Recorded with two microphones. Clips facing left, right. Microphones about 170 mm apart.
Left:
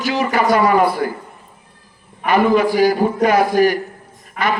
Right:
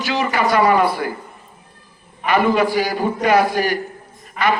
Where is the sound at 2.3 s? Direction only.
45° left (ahead or behind).